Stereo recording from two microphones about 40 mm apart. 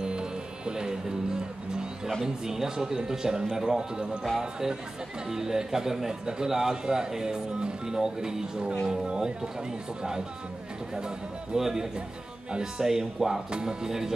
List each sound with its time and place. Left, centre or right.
0.0 s music: right
2.2 s a man's voice: centre
11.5 s a man's voice: centre